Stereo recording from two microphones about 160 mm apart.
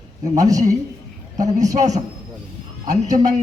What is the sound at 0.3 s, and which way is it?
A man's voice, 20° right (ahead or behind).